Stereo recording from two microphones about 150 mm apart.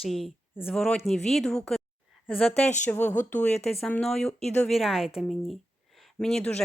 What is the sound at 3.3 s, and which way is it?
Speech, 45° left (ahead or behind).